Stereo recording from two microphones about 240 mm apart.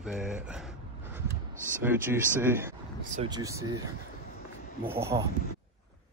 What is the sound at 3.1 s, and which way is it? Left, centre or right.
Speech, centre.